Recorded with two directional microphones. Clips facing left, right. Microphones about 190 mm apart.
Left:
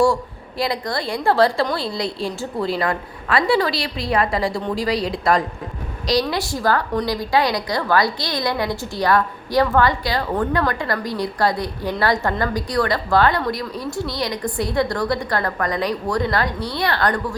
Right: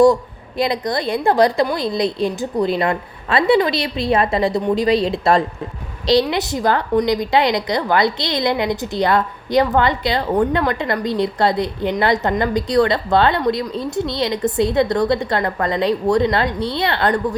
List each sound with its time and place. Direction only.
0.0 s a woman's voice: 20° right (ahead or behind)